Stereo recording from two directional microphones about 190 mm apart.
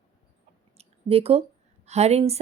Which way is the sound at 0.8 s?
30° right (ahead or behind).